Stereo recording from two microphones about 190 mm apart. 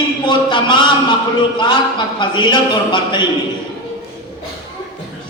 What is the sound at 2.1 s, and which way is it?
A man's voice, 25° left (ahead or behind).